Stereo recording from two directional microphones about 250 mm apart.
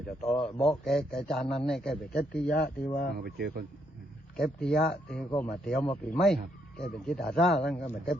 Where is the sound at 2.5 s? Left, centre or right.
Left.